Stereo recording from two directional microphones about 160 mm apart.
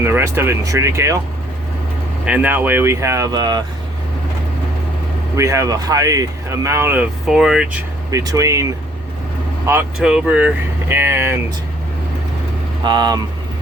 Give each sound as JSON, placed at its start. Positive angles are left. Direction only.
{"t": 0.0, "sound": "speech", "side_deg": -15}
{"t": 2.2, "sound": "speech", "side_deg": -10}
{"t": 5.4, "sound": "speech", "side_deg": -20}
{"t": 8.1, "sound": "speech", "side_deg": -20}
{"t": 9.6, "sound": "speech", "side_deg": -10}
{"t": 12.8, "sound": "speech", "side_deg": -25}